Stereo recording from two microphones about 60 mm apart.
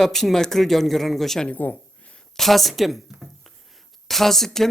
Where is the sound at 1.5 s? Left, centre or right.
Left.